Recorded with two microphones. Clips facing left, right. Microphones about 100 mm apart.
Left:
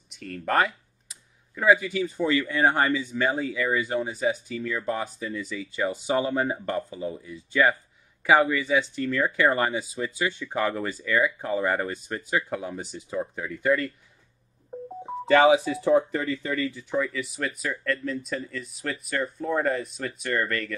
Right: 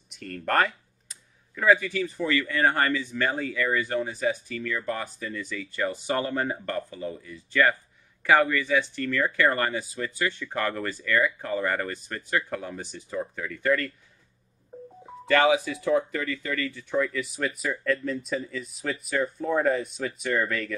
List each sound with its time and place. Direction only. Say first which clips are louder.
0.1 s speech: left 1 dB; centre (ahead or behind)
15.0 s speech: left 3 dB; 25° left (ahead or behind)
16.9 s speech: right 3 dB; centre (ahead or behind)